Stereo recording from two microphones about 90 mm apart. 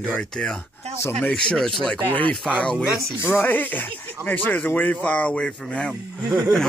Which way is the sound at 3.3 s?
25° left (ahead or behind).